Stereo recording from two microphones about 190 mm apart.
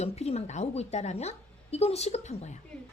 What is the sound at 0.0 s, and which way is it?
Speech, 35° left (ahead or behind).